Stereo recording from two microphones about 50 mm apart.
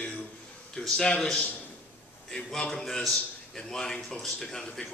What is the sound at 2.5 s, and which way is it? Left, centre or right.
A man's voice, centre.